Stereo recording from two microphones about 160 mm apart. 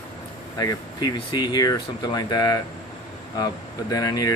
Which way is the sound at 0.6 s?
25° left (ahead or behind).